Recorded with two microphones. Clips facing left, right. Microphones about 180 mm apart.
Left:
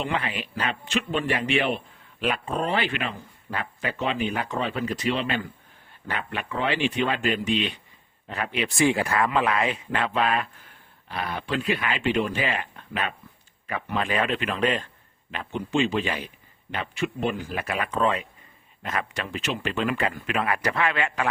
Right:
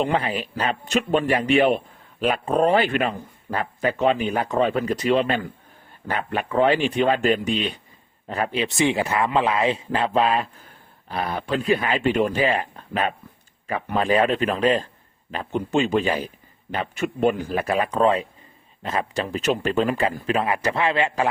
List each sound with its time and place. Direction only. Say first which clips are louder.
0.0 s speech: right 6 dB; 40° right (ahead or behind)
8.6 s a man's voice: left 1 dB; 20° right (ahead or behind)